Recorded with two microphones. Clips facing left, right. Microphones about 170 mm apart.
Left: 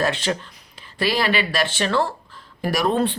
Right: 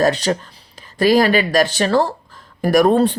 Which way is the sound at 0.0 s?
40° right (ahead or behind).